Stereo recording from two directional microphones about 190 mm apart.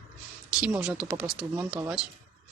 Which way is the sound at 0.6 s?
5° right (ahead or behind).